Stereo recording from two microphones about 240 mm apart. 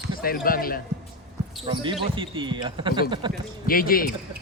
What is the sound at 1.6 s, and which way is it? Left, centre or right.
Speech, centre.